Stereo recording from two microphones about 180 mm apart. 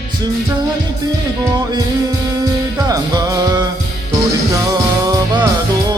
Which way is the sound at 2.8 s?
20° right (ahead or behind).